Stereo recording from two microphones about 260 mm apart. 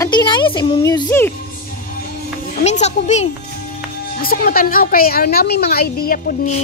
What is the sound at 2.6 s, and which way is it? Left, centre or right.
A child's voice, left.